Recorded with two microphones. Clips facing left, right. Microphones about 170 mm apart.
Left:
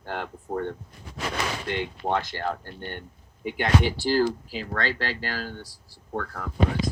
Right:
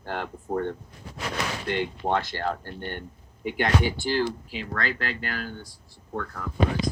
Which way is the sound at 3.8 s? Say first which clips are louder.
Left 3 dB; 35° left (ahead or behind).